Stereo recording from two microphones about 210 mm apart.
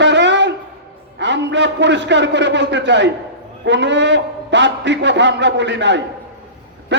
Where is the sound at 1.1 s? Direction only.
55° right (ahead or behind).